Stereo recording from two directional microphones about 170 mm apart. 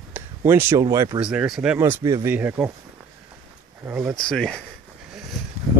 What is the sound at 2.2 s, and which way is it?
Speech, 10° right (ahead or behind).